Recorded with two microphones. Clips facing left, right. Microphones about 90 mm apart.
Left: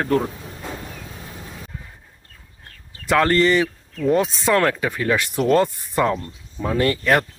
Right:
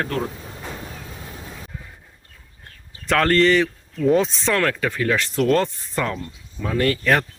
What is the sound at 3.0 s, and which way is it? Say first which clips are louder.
Speech: even; 5° left (ahead or behind).